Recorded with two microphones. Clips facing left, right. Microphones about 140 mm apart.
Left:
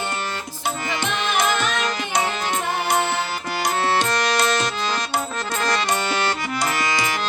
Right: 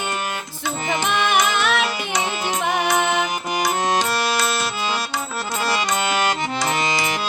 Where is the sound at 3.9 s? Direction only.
10° right (ahead or behind).